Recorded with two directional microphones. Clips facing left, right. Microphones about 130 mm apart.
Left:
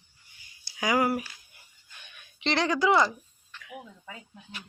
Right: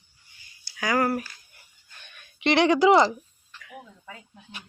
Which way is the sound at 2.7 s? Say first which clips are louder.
Right 4 dB; 25° right (ahead or behind).